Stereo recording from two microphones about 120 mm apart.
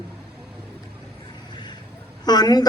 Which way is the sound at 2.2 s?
35° left (ahead or behind).